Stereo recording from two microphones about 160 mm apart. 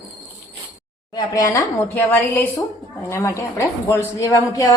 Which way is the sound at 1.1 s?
25° left (ahead or behind).